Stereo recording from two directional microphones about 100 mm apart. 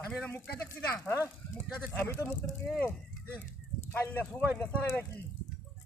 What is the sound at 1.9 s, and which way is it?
Speech, 25° left (ahead or behind).